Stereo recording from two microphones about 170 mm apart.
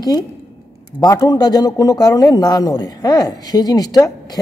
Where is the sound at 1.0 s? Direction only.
20° left (ahead or behind).